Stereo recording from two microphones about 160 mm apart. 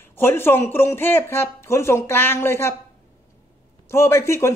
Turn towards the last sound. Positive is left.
turn(degrees=15)  # may be behind; listen again after turning